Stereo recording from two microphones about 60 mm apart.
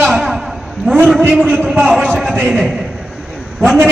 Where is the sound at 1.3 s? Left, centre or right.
Centre.